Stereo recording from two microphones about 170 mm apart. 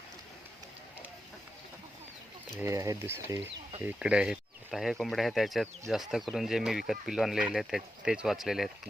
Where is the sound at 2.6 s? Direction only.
15° right (ahead or behind).